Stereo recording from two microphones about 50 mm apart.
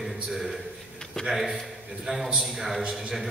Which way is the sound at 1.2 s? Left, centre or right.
Centre.